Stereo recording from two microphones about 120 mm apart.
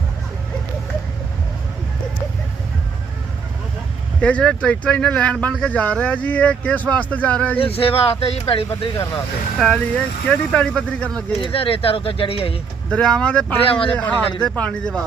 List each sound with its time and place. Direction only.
4.2 s speech: 10° left (ahead or behind)
7.6 s speech: 55° left (ahead or behind)
9.6 s speech: 5° left (ahead or behind)
11.4 s speech: 50° left (ahead or behind)
12.9 s speech: 5° left (ahead or behind)
13.7 s speech: 50° left (ahead or behind)
13.9 s speech: 10° left (ahead or behind)